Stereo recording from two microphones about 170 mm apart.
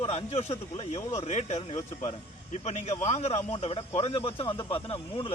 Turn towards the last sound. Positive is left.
turn(degrees=30)  # may be behind; listen again after turning